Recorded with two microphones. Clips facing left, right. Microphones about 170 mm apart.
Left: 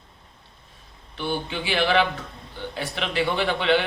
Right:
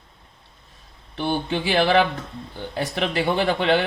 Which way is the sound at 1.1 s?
40° right (ahead or behind).